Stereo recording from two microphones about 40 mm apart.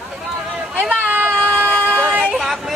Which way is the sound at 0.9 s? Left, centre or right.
Right.